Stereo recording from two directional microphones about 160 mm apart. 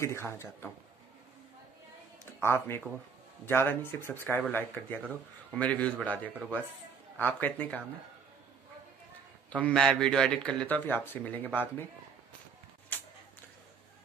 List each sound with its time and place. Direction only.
0.0 s speech: 15° left (ahead or behind)
2.4 s speech: 15° left (ahead or behind)
9.5 s speech: 5° left (ahead or behind)
12.9 s a sound: 10° left (ahead or behind)